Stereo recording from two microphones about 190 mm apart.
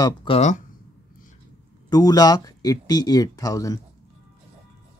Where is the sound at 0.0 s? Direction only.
25° left (ahead or behind).